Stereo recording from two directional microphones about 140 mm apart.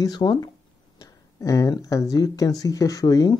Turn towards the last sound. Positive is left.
turn(degrees=25)  # may be behind; listen again after turning